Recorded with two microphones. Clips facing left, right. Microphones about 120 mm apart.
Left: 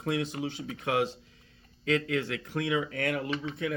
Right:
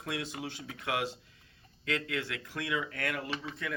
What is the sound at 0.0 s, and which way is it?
Speech, 40° left (ahead or behind).